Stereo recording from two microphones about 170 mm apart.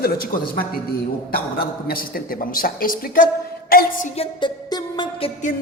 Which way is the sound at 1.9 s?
60° left (ahead or behind).